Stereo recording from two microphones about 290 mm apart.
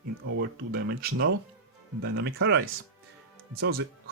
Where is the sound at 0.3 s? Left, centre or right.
Right.